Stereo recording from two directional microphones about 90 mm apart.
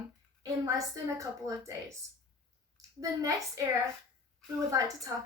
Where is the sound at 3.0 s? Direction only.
40° right (ahead or behind).